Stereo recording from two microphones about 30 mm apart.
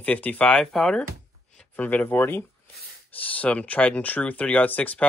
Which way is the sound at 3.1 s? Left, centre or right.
Left.